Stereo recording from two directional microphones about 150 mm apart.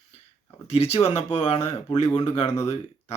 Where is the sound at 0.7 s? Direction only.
45° left (ahead or behind).